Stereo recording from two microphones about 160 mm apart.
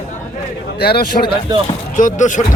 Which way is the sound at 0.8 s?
80° left.